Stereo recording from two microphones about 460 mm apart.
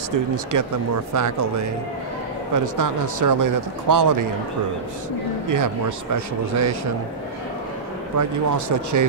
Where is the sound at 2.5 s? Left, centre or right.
Right.